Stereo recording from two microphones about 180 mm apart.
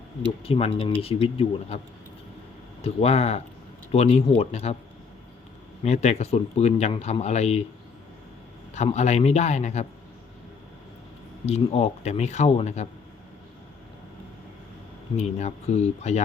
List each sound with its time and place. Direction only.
0.4 s speech: 30° left (ahead or behind)
2.8 s speech: 35° left (ahead or behind)
5.8 s speech: 40° left (ahead or behind)
8.7 s speech: 40° left (ahead or behind)
11.4 s speech: 35° left (ahead or behind)
15.2 s speech: 35° left (ahead or behind)